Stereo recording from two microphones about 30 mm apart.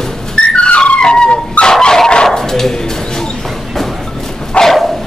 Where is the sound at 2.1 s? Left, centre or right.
Left.